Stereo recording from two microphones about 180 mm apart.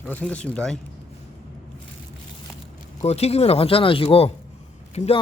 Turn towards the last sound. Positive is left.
turn(degrees=35)  # may be behind; listen again after turning